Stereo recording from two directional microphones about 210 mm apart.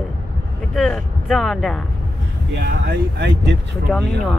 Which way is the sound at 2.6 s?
50° right (ahead or behind).